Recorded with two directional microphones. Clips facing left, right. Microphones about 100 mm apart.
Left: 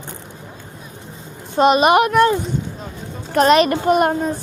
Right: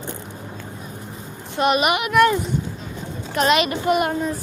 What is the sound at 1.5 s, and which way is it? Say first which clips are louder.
Speech: left 6 dB; 30° left (ahead or behind).